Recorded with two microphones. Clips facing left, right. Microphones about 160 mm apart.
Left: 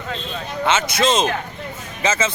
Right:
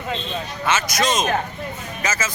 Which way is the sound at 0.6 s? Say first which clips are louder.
Left 3 dB; 25° left (ahead or behind).